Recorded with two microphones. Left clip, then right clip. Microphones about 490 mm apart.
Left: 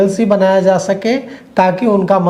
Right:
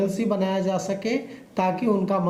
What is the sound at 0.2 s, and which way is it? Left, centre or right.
Speech, left.